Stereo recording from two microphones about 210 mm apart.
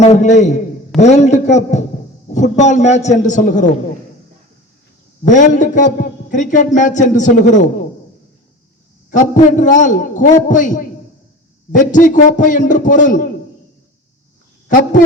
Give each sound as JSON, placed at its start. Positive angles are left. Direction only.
{"t": 0.0, "sound": "a man's voice", "side_deg": 35}
{"t": 5.3, "sound": "a man's voice", "side_deg": 35}
{"t": 9.0, "sound": "a man's voice", "side_deg": 35}